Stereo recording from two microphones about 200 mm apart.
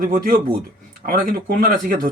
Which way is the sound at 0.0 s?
45° right (ahead or behind).